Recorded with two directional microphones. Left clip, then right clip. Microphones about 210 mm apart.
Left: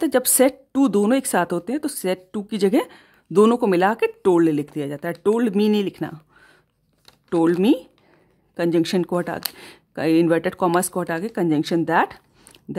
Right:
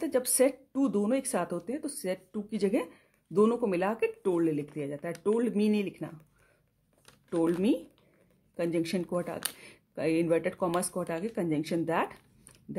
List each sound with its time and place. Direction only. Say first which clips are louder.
0.0 s speech: left 9 dB; 45° left (ahead or behind)
7.2 s speech: left 10 dB; 40° left (ahead or behind)